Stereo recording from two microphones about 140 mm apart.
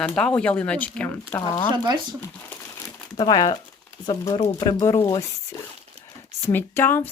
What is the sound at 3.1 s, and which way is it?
Speech, 30° left (ahead or behind).